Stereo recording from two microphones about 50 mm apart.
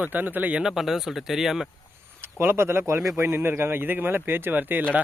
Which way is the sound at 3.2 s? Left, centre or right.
Right.